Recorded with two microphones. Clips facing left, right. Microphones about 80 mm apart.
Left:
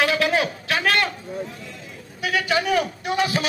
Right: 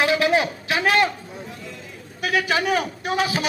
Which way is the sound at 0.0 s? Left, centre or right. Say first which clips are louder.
Right 1 dB; centre.